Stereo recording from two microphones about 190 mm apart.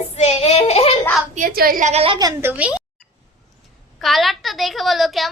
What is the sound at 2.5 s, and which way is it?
Speech, 5° right (ahead or behind).